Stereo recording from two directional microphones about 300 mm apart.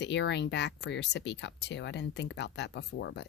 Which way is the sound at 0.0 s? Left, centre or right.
Left.